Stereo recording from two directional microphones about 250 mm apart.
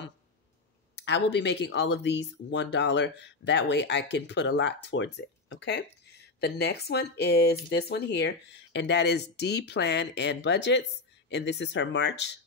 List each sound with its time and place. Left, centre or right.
0.9 s speech: left